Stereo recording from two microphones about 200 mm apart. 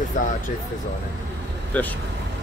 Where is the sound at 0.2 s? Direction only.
40° left (ahead or behind).